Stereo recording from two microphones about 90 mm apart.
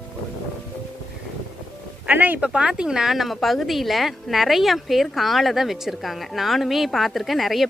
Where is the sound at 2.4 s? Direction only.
10° right (ahead or behind).